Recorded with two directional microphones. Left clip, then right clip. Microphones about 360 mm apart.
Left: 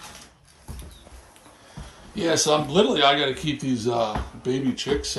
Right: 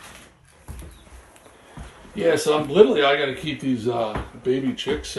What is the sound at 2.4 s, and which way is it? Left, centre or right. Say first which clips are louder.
Speech: right 4 dB; centre.